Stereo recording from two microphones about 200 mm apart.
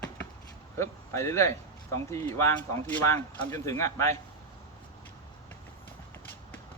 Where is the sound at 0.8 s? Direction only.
15° left (ahead or behind).